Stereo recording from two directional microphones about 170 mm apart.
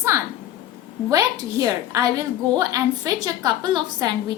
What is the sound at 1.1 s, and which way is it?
A woman's voice, 20° right (ahead or behind).